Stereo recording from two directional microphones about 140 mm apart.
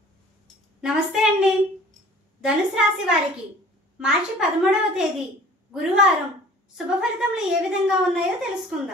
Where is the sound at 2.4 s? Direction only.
5° right (ahead or behind).